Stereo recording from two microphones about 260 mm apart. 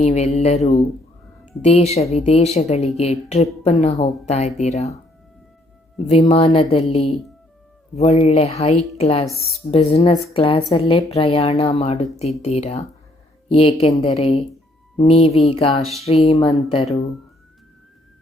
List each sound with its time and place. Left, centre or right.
0.0 s a woman's voice: left
6.0 s a woman's voice: left
15.8 s speech: centre
16.0 s a woman's voice: left